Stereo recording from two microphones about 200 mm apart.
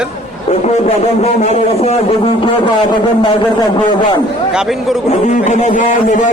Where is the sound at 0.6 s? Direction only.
35° left (ahead or behind).